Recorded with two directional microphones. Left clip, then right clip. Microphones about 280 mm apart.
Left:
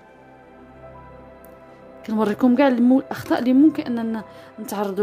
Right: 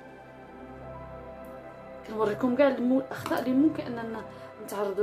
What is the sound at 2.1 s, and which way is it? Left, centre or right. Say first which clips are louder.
A woman's voice: left 7 dB; left.